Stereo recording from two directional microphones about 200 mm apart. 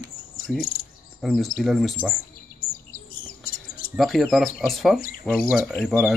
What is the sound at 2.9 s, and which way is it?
Chirp, 45° left (ahead or behind).